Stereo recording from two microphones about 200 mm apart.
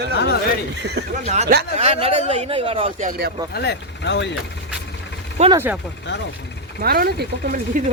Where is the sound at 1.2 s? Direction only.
35° right (ahead or behind).